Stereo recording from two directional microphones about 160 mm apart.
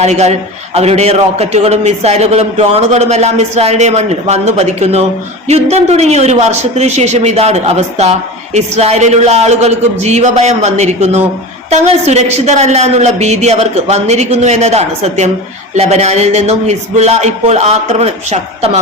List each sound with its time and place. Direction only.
0.0 s a man's voice: 45° right (ahead or behind)